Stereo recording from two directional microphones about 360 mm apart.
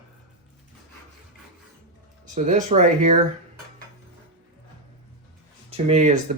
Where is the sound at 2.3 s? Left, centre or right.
Centre.